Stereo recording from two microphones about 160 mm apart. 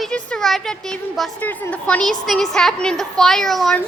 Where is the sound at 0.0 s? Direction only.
5° left (ahead or behind).